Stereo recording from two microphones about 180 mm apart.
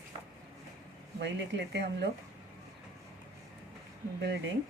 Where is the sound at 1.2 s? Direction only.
70° right (ahead or behind).